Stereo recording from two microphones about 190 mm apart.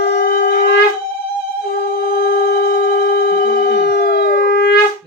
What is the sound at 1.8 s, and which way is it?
Telephone, 55° left (ahead or behind).